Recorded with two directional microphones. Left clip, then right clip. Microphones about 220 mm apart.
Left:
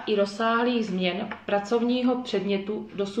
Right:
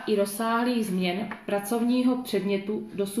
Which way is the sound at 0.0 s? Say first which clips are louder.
Left 2 dB; 50° right (ahead or behind).